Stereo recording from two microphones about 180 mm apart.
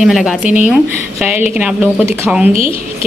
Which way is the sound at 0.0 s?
5° right (ahead or behind).